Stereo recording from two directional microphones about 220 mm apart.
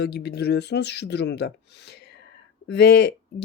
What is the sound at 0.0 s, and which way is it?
Speech, 45° left (ahead or behind).